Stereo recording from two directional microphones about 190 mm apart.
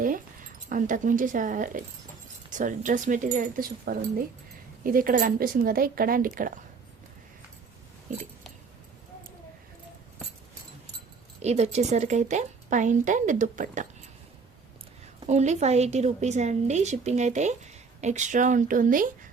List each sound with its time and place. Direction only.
0.7 s speech: 45° right (ahead or behind)
11.4 s a woman's voice: 35° right (ahead or behind)
15.3 s a woman's voice: 35° right (ahead or behind)